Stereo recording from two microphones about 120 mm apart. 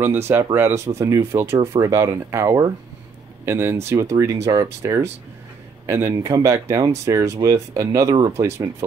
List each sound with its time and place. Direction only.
0.0 s speech: 20° right (ahead or behind)